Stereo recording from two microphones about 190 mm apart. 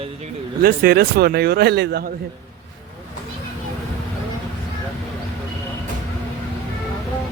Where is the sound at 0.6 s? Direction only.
50° right (ahead or behind).